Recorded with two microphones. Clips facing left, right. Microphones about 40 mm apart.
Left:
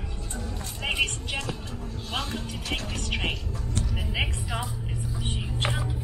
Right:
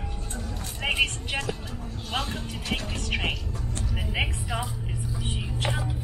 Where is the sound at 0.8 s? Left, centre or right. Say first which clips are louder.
Right 2 dB; right.